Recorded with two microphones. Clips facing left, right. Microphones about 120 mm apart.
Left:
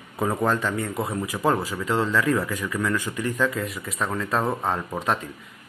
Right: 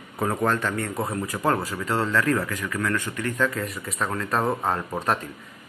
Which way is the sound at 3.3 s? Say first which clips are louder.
Even; centre (ahead or behind).